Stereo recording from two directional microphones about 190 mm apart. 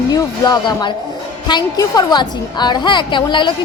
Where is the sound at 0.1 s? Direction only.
20° left (ahead or behind).